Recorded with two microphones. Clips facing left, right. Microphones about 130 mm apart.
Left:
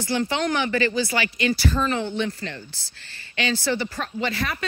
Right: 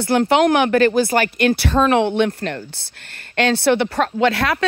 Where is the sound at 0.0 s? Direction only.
60° right (ahead or behind).